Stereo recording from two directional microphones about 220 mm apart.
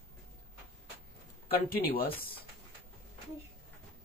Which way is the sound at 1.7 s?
40° left (ahead or behind).